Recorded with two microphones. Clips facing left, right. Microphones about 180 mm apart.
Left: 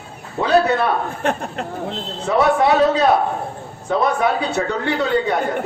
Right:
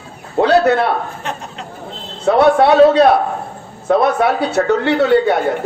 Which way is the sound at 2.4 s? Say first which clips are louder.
Right 5 dB; 75° right (ahead or behind).